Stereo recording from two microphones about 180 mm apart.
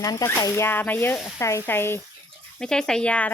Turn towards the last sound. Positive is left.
turn(degrees=5)  # may be behind; listen again after turning